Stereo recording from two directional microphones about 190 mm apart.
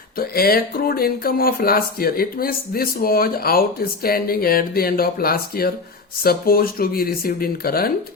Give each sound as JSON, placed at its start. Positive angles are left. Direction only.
{"t": 0.2, "sound": "speech", "side_deg": 50}